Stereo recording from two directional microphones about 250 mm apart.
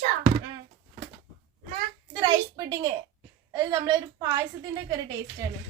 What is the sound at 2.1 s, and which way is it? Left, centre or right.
A woman's voice, centre.